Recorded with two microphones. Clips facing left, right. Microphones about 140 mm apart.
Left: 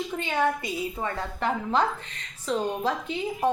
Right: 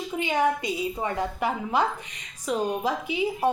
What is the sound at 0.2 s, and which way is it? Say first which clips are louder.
A woman's voice: right 3 dB; 15° right (ahead or behind).